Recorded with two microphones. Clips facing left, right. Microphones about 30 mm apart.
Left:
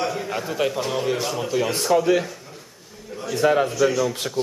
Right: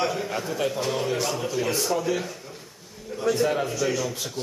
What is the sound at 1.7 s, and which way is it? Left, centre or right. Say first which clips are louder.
Speech: left 7 dB; left.